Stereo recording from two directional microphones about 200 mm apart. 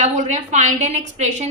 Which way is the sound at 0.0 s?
35° right (ahead or behind).